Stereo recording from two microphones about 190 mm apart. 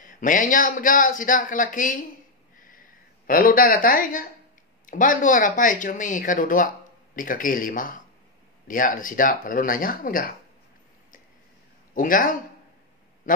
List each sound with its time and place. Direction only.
0.0 s a man's voice: 45° left (ahead or behind)
2.6 s a sound: 45° left (ahead or behind)
4.8 s a man's voice: 45° left (ahead or behind)
11.9 s a man's voice: 45° left (ahead or behind)